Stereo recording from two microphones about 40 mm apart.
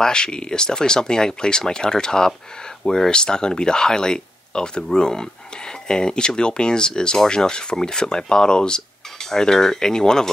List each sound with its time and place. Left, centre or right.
0.0 s speech: left